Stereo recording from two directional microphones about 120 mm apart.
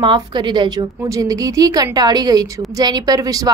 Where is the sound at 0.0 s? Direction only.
40° right (ahead or behind).